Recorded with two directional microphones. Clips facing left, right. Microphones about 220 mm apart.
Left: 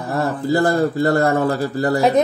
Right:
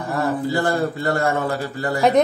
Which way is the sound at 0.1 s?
40° left (ahead or behind).